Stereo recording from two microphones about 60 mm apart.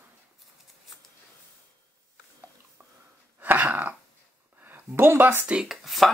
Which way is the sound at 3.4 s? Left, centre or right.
Right.